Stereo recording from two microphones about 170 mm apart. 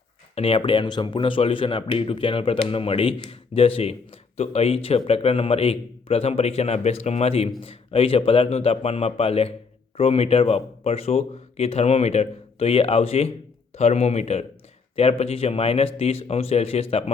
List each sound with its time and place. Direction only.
0.3 s speech: 35° left (ahead or behind)